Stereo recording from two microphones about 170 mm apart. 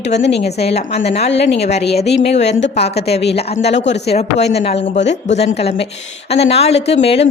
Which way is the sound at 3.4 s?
35° left (ahead or behind).